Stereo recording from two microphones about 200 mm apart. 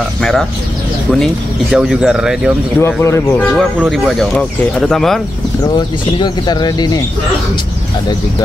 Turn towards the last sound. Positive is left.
turn(degrees=20)  # may be behind; listen again after turning